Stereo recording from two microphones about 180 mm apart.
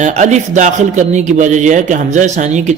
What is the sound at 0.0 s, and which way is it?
A man's voice, 40° right (ahead or behind).